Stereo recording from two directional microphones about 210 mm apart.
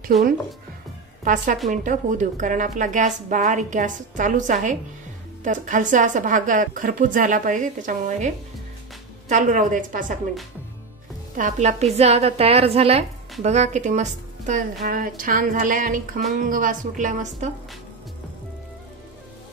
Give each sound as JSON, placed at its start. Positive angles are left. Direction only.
{"t": 0.0, "sound": "a woman's voice", "side_deg": -40}
{"t": 9.3, "sound": "a woman's voice", "side_deg": -40}
{"t": 11.3, "sound": "a woman's voice", "side_deg": -35}